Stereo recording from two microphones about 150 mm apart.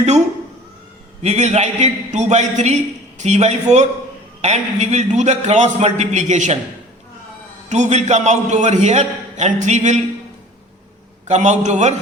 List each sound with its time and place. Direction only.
1.2 s a man's voice: 50° right (ahead or behind)
7.7 s a man's voice: 50° right (ahead or behind)
11.3 s a man's voice: 50° right (ahead or behind)